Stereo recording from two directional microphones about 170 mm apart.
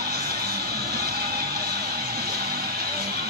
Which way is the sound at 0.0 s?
65° right (ahead or behind).